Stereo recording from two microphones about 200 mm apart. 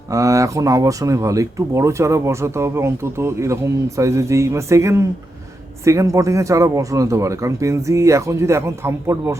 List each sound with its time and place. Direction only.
0.1 s speech: 15° right (ahead or behind)